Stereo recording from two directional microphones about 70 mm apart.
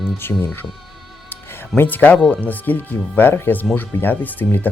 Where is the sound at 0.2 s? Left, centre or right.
Left.